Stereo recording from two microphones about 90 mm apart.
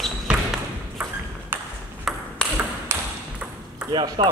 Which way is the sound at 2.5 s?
20° right (ahead or behind).